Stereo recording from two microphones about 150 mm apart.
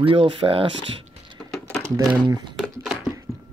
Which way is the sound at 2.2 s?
30° right (ahead or behind).